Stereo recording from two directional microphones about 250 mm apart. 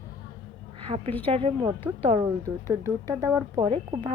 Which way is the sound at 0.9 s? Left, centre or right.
Right.